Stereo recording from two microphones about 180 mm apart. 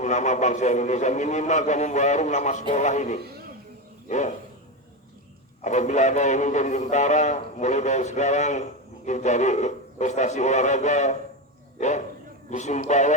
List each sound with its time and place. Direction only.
0.0 s a man's voice: 40° left (ahead or behind)
3.2 s a man's voice: 60° right (ahead or behind)
4.1 s a man's voice: 40° left (ahead or behind)
5.6 s a man's voice: 40° left (ahead or behind)